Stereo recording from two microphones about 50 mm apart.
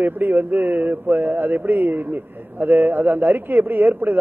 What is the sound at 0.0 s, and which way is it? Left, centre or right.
A man's voice, right.